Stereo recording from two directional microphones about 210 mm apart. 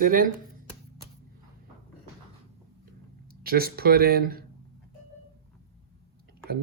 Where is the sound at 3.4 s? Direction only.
45° right (ahead or behind).